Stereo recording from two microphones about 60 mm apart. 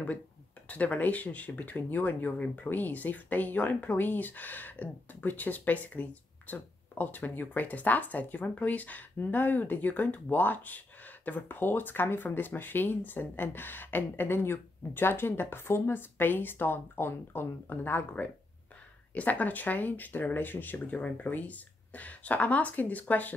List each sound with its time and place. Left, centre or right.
0.7 s speech: left
19.1 s speech: left